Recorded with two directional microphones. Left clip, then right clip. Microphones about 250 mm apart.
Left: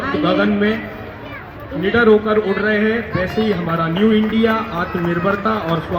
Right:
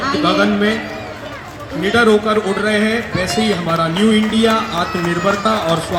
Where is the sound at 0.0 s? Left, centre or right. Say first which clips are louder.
Right 2 dB; right.